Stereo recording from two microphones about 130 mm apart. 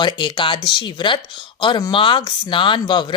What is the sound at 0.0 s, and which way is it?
Speech, 35° left (ahead or behind).